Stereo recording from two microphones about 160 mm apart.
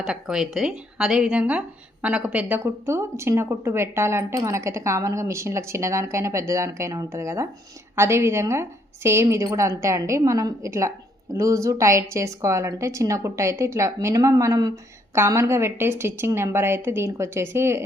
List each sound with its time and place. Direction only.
0.0 s a woman's voice: 5° right (ahead or behind)